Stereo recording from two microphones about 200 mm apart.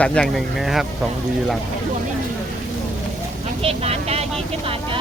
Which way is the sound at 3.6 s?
30° right (ahead or behind).